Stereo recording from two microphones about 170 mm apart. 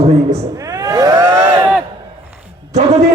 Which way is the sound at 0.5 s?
20° right (ahead or behind).